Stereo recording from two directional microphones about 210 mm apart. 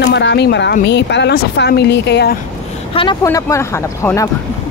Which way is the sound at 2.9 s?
20° left (ahead or behind).